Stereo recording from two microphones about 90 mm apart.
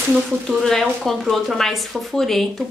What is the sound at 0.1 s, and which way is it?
Speech, centre (ahead or behind).